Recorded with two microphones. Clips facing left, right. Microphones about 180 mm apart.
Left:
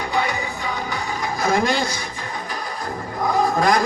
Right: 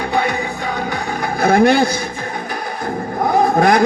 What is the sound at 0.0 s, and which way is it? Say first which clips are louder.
Music: right 5 dB; 60° right (ahead or behind).